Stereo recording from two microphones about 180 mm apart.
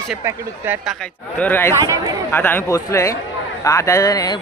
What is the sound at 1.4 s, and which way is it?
Speech, 10° left (ahead or behind).